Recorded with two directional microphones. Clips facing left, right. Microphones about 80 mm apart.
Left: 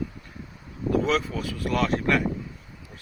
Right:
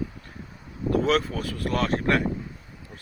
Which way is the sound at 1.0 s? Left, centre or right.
Right.